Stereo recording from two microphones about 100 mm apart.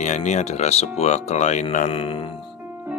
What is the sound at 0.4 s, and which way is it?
Speech, 90° left.